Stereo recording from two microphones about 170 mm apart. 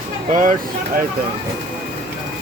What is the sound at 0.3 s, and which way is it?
Speech, 50° right (ahead or behind).